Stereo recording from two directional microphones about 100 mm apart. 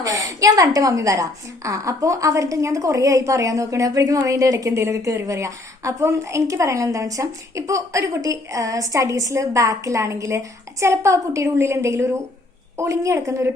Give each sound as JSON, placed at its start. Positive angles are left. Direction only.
{"t": 0.0, "sound": "a woman's voice", "side_deg": -35}